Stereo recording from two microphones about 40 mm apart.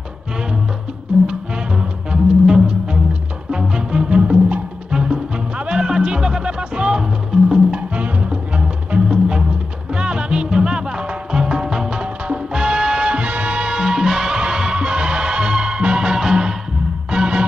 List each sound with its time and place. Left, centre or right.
2.4 s music: centre
4.2 s music: right
4.9 s music: centre
6.7 s music: right
7.0 s music: centre
7.7 s music: right